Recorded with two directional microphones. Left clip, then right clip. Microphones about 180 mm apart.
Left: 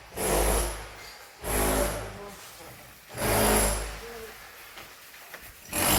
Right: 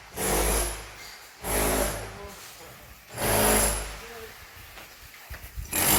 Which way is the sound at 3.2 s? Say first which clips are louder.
Right 1 dB; 55° right (ahead or behind).